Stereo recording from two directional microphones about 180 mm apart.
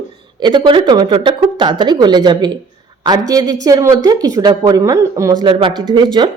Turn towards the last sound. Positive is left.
turn(degrees=-25)  # may be behind; listen again after turning